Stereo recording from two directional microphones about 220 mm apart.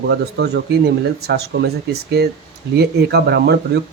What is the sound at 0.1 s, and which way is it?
Speech, 50° right (ahead or behind).